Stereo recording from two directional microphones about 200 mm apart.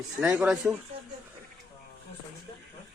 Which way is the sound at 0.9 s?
30° right (ahead or behind).